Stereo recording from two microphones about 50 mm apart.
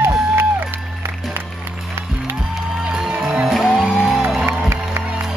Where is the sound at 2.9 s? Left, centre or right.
Centre.